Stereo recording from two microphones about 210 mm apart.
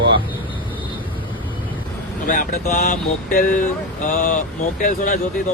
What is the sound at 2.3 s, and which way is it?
Speech, 40° left (ahead or behind).